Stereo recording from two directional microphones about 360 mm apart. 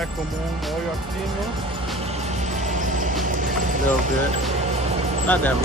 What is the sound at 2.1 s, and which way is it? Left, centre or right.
Music, centre.